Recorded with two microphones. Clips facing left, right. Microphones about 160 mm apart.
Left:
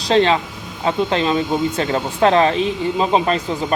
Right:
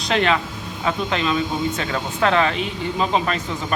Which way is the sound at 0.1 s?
30° left (ahead or behind).